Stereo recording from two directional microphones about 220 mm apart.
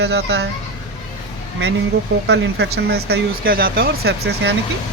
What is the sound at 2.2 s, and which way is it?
Speech, 50° right (ahead or behind).